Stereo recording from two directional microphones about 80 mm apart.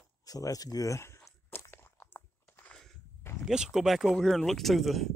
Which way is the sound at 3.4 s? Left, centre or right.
Centre.